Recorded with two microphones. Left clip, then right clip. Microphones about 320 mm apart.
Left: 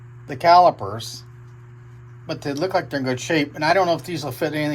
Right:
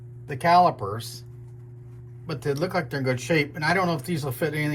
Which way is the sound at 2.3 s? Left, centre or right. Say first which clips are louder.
Left 3 dB; left.